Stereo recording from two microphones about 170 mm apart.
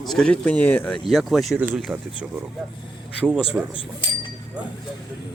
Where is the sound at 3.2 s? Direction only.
5° right (ahead or behind).